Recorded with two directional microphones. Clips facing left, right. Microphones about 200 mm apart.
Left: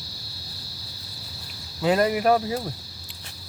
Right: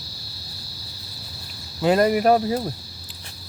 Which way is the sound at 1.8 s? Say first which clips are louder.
Right 3 dB; 40° right (ahead or behind).